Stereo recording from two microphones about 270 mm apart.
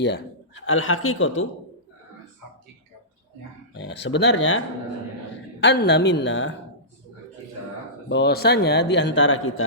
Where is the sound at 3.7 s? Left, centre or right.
Left.